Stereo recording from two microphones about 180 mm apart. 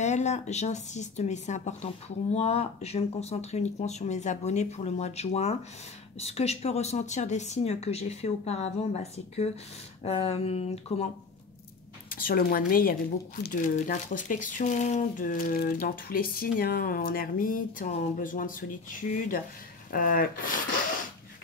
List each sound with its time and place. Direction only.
0.0 s speech: 40° left (ahead or behind)
12.1 s speech: 50° left (ahead or behind)